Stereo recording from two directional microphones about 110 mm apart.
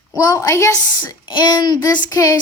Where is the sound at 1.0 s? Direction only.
40° left (ahead or behind).